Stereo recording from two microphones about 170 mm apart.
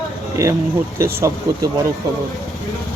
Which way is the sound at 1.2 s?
20° right (ahead or behind).